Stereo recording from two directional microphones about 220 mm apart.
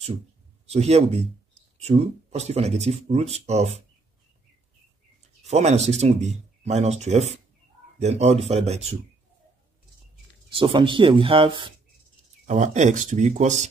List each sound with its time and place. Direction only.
0.7 s speech: 30° right (ahead or behind)
5.5 s speech: 30° right (ahead or behind)
10.5 s speech: 25° right (ahead or behind)
12.4 s speech: 35° right (ahead or behind)